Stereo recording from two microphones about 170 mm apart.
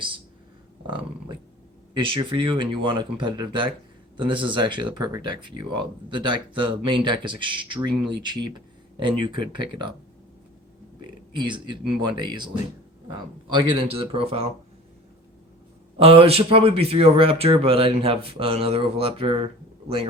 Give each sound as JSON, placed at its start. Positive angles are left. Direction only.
{"t": 2.0, "sound": "speech", "side_deg": -30}
{"t": 11.3, "sound": "speech", "side_deg": -25}
{"t": 13.5, "sound": "speech", "side_deg": -30}
{"t": 16.0, "sound": "speech", "side_deg": -35}